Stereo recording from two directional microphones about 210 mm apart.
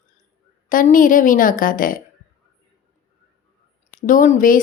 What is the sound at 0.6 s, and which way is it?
A woman's voice, 40° left (ahead or behind).